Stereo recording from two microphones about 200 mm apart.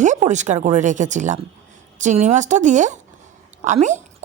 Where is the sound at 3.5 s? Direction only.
35° right (ahead or behind).